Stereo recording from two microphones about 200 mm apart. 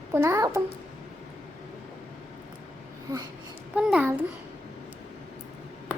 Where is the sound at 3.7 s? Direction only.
5° right (ahead or behind).